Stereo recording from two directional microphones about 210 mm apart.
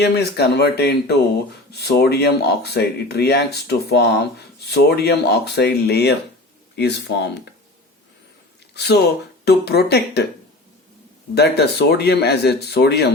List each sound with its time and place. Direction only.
0.0 s speech: 50° left (ahead or behind)
8.7 s a sound: 50° left (ahead or behind)
9.4 s speech: 50° left (ahead or behind)
11.3 s speech: 50° left (ahead or behind)